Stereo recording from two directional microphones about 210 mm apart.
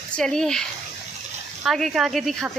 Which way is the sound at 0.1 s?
5° left (ahead or behind).